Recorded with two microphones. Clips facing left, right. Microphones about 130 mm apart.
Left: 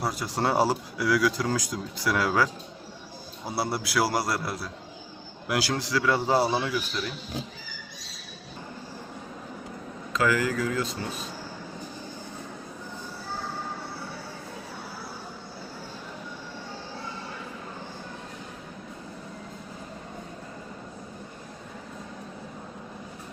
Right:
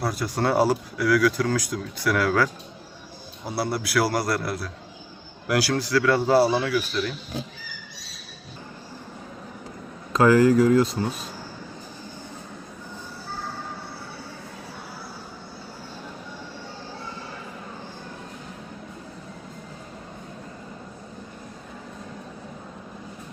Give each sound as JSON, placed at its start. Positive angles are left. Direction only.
{"t": 0.0, "sound": "speech", "side_deg": 20}
{"t": 3.5, "sound": "speech", "side_deg": 25}
{"t": 10.1, "sound": "speech", "side_deg": -40}